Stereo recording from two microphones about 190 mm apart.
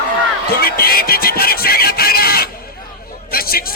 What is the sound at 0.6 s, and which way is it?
A man's voice, 55° left (ahead or behind).